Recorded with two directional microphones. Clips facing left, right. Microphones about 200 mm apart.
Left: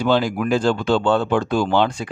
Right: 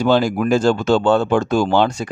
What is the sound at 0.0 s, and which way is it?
Speech, 40° right (ahead or behind).